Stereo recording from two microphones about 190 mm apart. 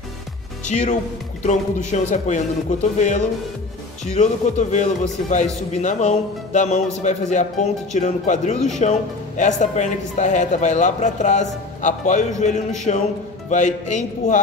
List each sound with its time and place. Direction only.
0.7 s a man's voice: 40° left (ahead or behind)